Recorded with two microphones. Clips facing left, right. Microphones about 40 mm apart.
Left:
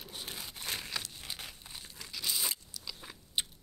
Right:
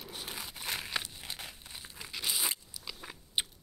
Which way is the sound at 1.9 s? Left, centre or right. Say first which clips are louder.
Right 1 dB; centre.